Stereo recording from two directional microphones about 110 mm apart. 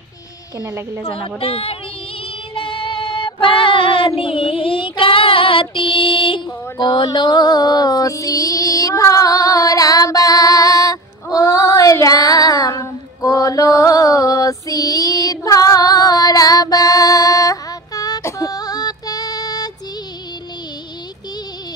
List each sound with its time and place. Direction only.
0.6 s a woman's voice: 20° right (ahead or behind)
1.1 s a woman's voice: 60° left (ahead or behind)
2.5 s child singing: 50° left (ahead or behind)